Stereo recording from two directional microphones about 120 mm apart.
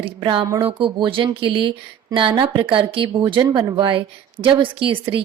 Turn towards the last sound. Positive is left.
turn(degrees=-45)  # may be behind; listen again after turning